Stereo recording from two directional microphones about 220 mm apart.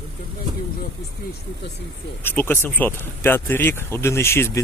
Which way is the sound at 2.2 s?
10° left (ahead or behind).